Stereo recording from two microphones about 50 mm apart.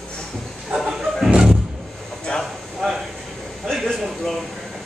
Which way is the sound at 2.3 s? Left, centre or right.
Centre.